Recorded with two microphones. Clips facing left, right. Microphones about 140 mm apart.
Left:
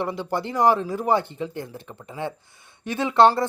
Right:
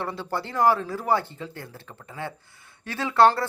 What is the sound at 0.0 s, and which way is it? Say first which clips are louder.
Speech: left 4 dB; 15° left (ahead or behind).